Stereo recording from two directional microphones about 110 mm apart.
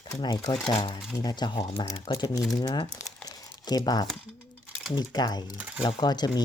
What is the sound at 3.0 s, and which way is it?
Crumpling, 35° left (ahead or behind).